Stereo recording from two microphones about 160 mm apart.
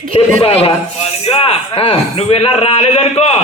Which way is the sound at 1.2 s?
40° left (ahead or behind).